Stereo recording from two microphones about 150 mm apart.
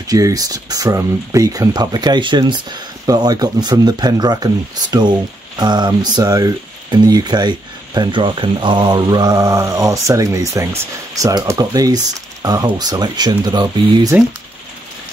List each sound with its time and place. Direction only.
0.0 s speech: 25° right (ahead or behind)